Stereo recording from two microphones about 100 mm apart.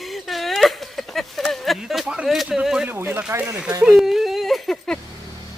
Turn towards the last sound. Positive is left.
turn(degrees=5)  # may be behind; listen again after turning